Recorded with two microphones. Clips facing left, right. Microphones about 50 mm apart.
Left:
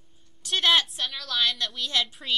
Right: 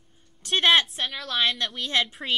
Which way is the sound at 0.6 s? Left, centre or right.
Centre.